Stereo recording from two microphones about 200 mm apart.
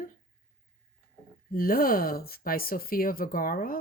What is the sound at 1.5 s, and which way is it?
Speech, 45° left (ahead or behind).